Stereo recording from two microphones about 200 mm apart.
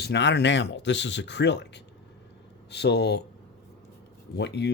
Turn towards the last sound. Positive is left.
turn(degrees=55)  # may be behind; listen again after turning